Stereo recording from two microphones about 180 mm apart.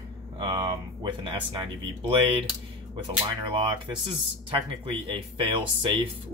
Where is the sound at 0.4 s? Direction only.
25° right (ahead or behind).